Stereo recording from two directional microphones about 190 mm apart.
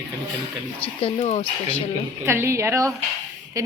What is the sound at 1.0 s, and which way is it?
Speech, 30° left (ahead or behind).